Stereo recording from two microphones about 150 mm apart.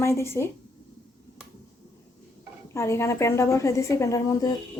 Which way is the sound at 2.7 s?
20° left (ahead or behind).